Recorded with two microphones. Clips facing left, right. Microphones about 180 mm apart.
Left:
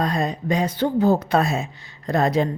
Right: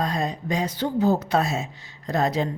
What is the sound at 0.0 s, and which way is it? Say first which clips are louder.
Speech: left 3 dB; 60° left (ahead or behind).